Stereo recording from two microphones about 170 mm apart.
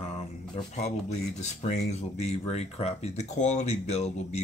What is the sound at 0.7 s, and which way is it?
Speech, 40° left (ahead or behind).